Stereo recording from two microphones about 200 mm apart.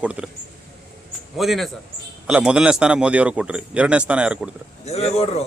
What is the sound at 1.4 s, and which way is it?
Speech, centre (ahead or behind).